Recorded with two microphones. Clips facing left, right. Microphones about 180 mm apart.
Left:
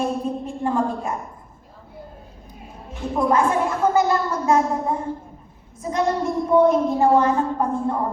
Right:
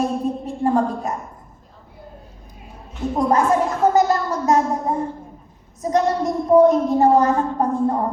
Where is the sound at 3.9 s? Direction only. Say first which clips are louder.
Right 2 dB; 40° right (ahead or behind).